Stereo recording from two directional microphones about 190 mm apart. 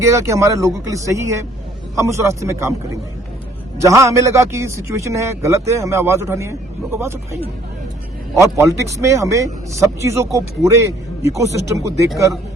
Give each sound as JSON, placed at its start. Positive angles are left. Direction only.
{"t": 0.0, "sound": "a man's voice", "side_deg": -15}
{"t": 3.8, "sound": "a man's voice", "side_deg": -15}
{"t": 8.4, "sound": "a man's voice", "side_deg": -15}